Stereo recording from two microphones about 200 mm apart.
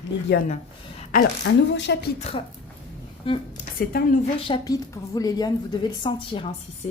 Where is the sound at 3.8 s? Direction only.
45° left (ahead or behind).